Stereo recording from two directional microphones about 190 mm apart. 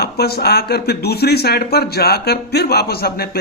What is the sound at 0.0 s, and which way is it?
Speech, 60° left (ahead or behind).